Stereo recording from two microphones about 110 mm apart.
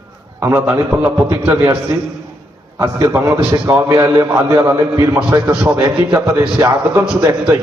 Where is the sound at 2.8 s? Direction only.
20° right (ahead or behind).